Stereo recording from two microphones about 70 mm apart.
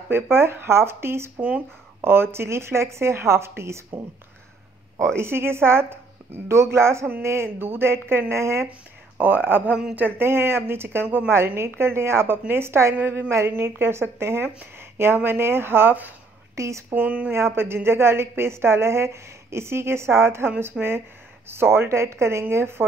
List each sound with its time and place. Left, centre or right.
0.1 s a woman's voice: right
1.4 s speech: centre
2.0 s a woman's voice: right
5.1 s a woman's voice: right
9.2 s a woman's voice: right
12.9 s speech: right
13.3 s a woman's voice: right
16.5 s speech: right
16.9 s speech: right
17.3 s a woman's voice: right